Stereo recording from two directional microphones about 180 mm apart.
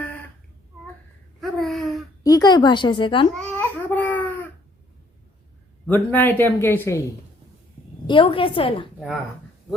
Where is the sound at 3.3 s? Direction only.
10° left (ahead or behind).